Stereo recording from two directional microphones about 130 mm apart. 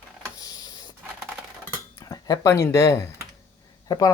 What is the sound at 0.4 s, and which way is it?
Printer, 30° left (ahead or behind).